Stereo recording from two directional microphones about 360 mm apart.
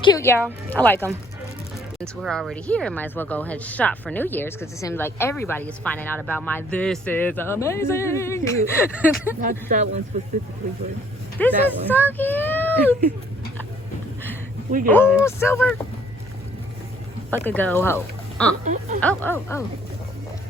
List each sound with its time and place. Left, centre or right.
0.0 s speech: centre
9.4 s speech: right
11.3 s a child's voice: centre
14.8 s speech: centre
17.4 s speech: centre
18.6 s speech: centre
19.0 s speech: centre